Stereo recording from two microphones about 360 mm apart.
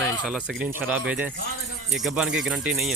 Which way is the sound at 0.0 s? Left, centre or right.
Centre.